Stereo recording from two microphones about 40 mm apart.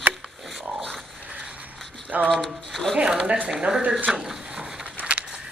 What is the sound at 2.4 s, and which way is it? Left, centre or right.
Speech, centre.